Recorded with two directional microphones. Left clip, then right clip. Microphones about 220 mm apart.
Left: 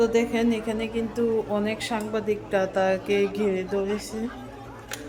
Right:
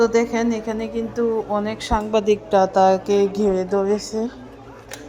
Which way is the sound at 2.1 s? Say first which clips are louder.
Right 9 dB; 25° right (ahead or behind).